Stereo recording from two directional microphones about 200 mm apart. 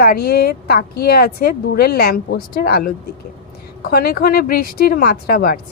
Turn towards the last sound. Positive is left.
turn(degrees=50)  # may be behind; listen again after turning